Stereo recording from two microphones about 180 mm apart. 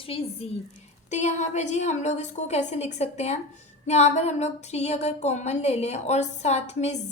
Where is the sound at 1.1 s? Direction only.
40° left (ahead or behind).